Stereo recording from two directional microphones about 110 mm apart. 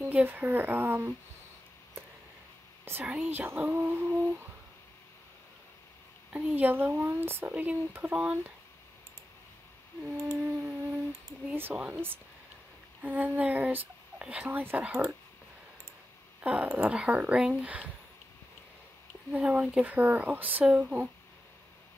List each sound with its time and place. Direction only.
0.0 s speech: 15° right (ahead or behind)
2.8 s speech: 20° right (ahead or behind)
6.3 s speech: 15° right (ahead or behind)
10.2 s music: 20° right (ahead or behind)
11.5 s speech: 15° right (ahead or behind)
16.3 s speech: 15° right (ahead or behind)
19.3 s speech: 10° right (ahead or behind)